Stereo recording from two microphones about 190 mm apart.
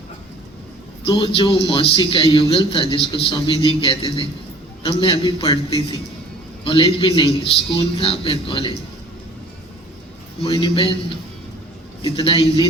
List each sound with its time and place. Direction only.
1.0 s a man's voice: 25° left (ahead or behind)
10.4 s a man's voice: 30° left (ahead or behind)
12.0 s a man's voice: 30° left (ahead or behind)